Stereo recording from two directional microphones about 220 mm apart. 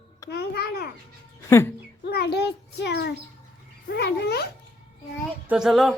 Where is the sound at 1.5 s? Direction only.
10° left (ahead or behind).